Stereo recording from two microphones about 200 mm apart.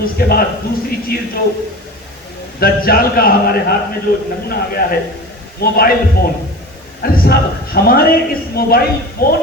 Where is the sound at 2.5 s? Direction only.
50° left (ahead or behind).